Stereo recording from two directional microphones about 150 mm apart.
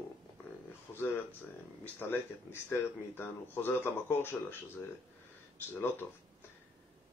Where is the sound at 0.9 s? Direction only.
15° left (ahead or behind).